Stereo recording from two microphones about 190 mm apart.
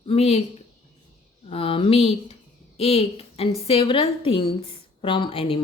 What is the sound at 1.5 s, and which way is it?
Speech, 30° left (ahead or behind).